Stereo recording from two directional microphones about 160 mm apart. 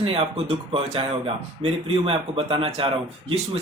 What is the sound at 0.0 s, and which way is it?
Speech, 35° right (ahead or behind).